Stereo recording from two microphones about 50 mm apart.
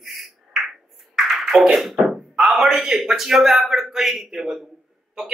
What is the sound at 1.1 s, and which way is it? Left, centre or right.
Speech, centre.